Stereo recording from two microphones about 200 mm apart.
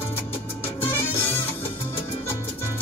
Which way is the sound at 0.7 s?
10° left (ahead or behind).